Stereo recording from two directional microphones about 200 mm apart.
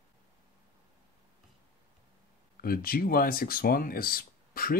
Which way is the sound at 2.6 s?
50° left (ahead or behind).